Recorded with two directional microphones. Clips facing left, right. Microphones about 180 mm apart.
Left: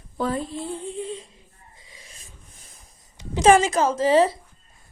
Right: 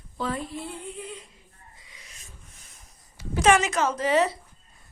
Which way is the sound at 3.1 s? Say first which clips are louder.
Left 4 dB; 20° left (ahead or behind).